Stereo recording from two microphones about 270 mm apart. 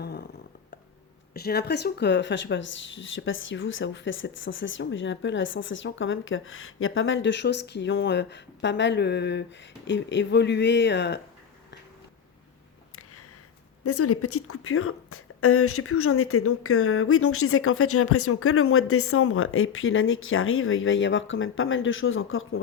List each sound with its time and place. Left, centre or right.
0.0 s a sound: left
1.3 s a woman's voice: left
13.8 s a woman's voice: left